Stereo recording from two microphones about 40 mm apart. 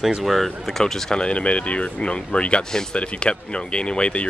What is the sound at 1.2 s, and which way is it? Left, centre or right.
Speech, left.